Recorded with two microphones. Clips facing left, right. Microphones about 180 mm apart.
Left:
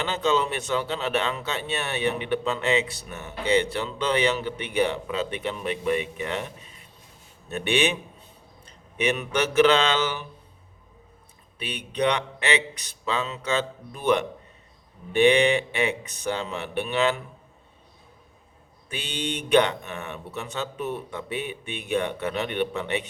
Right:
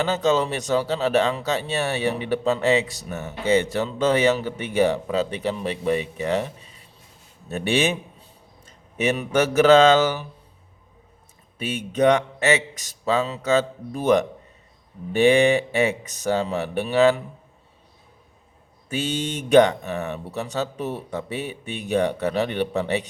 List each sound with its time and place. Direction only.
0.0 s speech: 40° right (ahead or behind)
11.5 s a man's voice: 45° right (ahead or behind)
18.9 s speech: 45° right (ahead or behind)